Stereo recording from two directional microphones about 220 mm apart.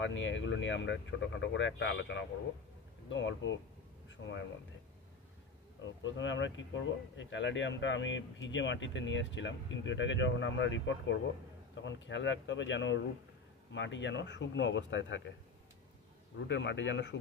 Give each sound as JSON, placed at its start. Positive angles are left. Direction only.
{"t": 0.0, "sound": "a man's voice", "side_deg": 55}
{"t": 5.9, "sound": "speech", "side_deg": 55}
{"t": 16.4, "sound": "speech", "side_deg": 55}